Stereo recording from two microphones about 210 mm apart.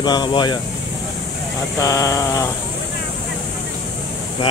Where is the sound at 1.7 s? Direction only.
15° left (ahead or behind).